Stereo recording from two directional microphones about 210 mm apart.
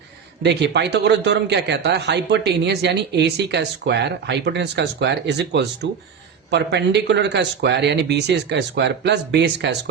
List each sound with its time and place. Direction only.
0.4 s speech: 55° right (ahead or behind)